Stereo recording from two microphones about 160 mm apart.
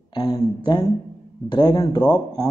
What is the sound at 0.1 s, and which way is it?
Speech, 25° left (ahead or behind).